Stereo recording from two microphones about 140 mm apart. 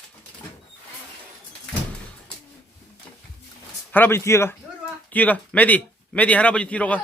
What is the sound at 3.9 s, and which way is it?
A man's voice, 15° left (ahead or behind).